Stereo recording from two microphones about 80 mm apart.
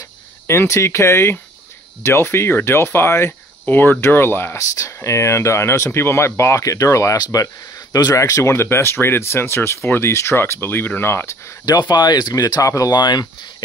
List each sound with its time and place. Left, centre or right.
0.5 s speech: left
4.6 s speech: left
11.6 s speech: left